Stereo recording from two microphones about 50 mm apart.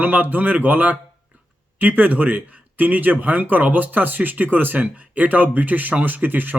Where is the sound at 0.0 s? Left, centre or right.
Right.